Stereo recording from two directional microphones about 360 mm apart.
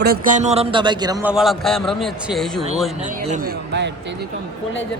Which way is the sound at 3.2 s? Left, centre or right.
Right.